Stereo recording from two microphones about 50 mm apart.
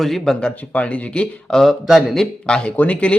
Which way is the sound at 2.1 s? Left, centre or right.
Centre.